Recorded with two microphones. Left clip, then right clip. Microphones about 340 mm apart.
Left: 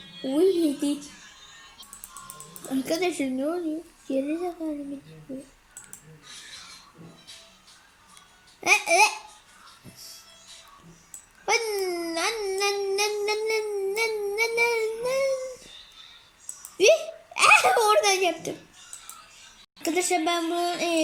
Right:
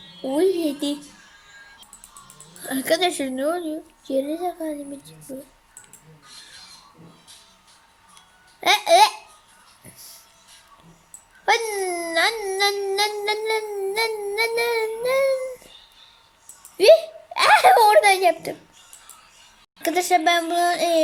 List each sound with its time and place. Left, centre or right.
0.2 s speech: right
2.6 s speech: right
3.3 s speech: right
4.0 s speech: right
8.6 s speech: right
11.4 s speech: right
16.7 s a child's voice: right
19.8 s speech: right